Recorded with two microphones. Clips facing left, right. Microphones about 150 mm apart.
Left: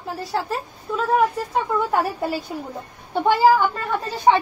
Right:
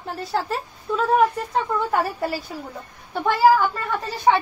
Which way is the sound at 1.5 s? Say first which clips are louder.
Left 1 dB; 15° left (ahead or behind).